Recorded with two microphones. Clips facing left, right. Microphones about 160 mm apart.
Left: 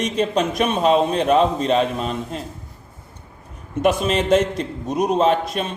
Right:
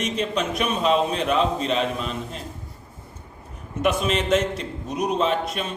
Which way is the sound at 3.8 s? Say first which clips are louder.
Left 4 dB; 40° left (ahead or behind).